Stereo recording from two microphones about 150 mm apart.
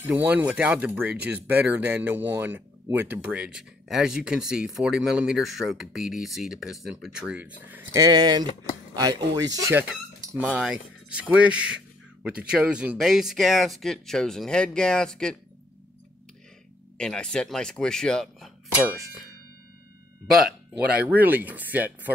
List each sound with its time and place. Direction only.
0.0 s speech: 10° right (ahead or behind)
9.8 s speech: 10° right (ahead or behind)
16.9 s speech: 5° left (ahead or behind)
21.0 s speech: 10° right (ahead or behind)